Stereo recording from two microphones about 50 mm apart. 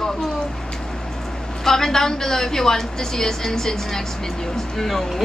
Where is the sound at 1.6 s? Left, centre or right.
Centre.